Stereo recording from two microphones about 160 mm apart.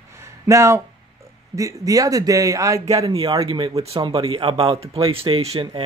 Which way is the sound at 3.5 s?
35° right (ahead or behind).